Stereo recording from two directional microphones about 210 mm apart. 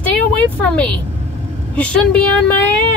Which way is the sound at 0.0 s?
5° left (ahead or behind).